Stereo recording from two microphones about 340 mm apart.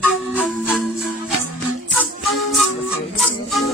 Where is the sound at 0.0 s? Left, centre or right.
Centre.